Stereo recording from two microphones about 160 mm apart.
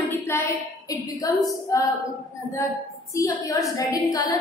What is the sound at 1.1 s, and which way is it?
Speech, 20° left (ahead or behind).